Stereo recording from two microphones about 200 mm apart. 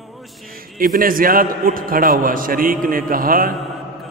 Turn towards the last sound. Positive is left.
turn(degrees=-45)  # may be behind; listen again after turning